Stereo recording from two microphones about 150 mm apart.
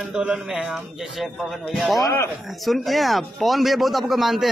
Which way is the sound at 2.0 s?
20° left (ahead or behind).